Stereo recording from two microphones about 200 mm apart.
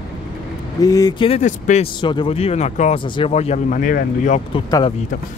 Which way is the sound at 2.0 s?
25° left (ahead or behind).